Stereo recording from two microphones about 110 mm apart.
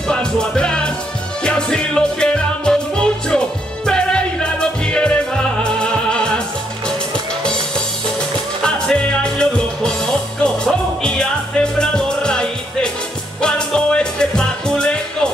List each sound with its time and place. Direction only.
0.1 s music: 5° left (ahead or behind)
8.6 s music: 5° left (ahead or behind)